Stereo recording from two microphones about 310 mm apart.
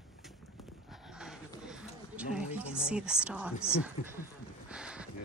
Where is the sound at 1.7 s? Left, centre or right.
Centre.